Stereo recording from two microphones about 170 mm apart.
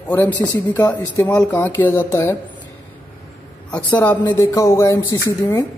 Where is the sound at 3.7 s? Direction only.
10° left (ahead or behind).